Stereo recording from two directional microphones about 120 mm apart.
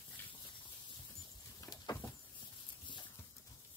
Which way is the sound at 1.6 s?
30° left (ahead or behind).